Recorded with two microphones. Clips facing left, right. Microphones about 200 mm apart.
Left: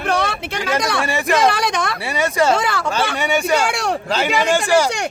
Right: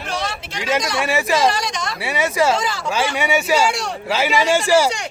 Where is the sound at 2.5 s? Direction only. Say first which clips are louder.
Left 3 dB; 60° left (ahead or behind).